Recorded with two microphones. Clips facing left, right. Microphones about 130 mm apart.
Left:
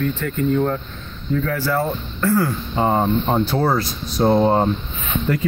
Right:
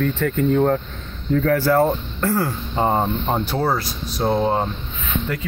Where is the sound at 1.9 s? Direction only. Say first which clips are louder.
Left 1 dB; 30° right (ahead or behind).